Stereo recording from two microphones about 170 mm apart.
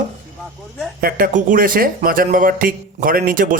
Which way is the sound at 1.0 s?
55° right (ahead or behind).